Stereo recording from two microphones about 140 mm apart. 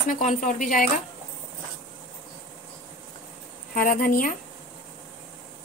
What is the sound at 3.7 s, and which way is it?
Speech, 85° left.